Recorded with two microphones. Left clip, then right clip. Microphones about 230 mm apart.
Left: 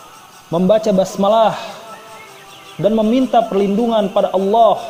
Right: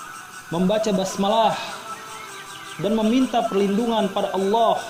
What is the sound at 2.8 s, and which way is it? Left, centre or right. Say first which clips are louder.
A man's voice: left 7 dB; left.